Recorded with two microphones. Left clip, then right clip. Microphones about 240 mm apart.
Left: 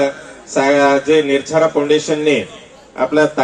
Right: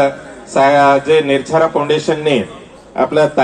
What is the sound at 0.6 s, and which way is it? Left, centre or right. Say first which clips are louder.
Speech: right 3 dB; right.